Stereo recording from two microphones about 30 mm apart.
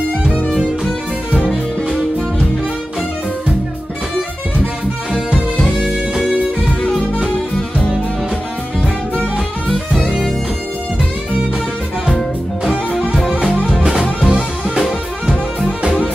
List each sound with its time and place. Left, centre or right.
5.8 s music: centre
12.1 s music: centre
14.2 s music: right